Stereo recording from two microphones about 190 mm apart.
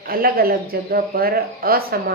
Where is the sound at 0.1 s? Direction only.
50° right (ahead or behind).